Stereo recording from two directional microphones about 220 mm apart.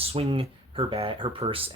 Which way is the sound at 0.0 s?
25° right (ahead or behind).